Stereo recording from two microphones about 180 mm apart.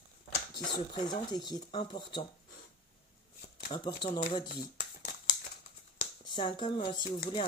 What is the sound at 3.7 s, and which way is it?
Speech, 20° left (ahead or behind).